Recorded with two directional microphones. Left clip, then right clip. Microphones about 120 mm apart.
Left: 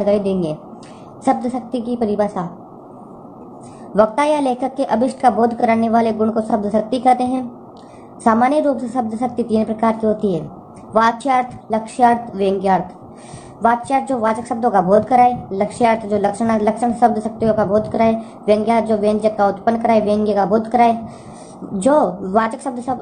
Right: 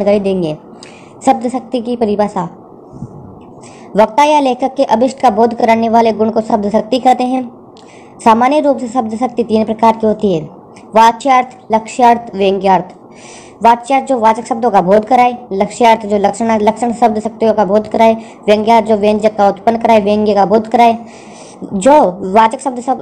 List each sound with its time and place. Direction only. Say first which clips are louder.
0.0 s a woman's voice: right 5 dB; 25° right (ahead or behind)
4.0 s a woman's voice: right 6 dB; 20° right (ahead or behind)